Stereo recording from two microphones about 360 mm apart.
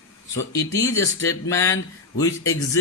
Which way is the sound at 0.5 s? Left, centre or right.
Centre.